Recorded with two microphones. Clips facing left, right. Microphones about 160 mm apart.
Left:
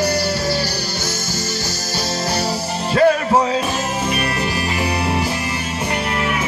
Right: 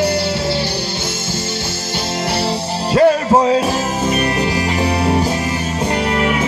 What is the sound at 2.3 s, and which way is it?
Music, 30° right (ahead or behind).